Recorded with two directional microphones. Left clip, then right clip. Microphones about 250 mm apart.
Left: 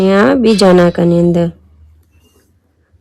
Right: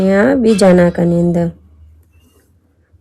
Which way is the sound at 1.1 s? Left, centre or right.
Left.